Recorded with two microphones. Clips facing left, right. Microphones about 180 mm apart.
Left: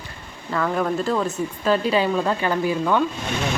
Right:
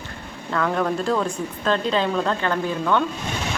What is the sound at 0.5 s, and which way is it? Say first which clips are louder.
Speech: even; 5° left (ahead or behind).